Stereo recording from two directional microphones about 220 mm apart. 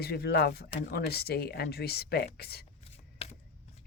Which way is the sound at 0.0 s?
45° left (ahead or behind).